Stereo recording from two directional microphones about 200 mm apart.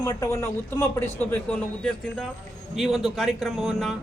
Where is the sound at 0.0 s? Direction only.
15° left (ahead or behind).